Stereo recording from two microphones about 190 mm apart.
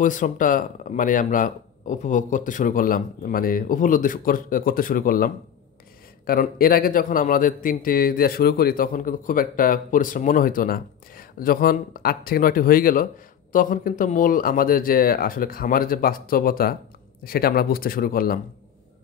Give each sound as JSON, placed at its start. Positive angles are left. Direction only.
{"t": 0.0, "sound": "a man's voice", "side_deg": 45}